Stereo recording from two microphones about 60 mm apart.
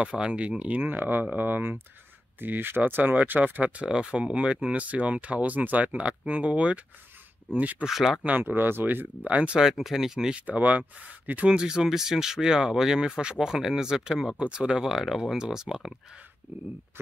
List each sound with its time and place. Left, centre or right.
0.0 s speech: centre
3.8 s speech: centre
7.8 s speech: centre
8.2 s speech: right
9.2 s speech: right
9.6 s speech: centre
10.4 s speech: right
11.5 s speech: centre
14.9 s speech: centre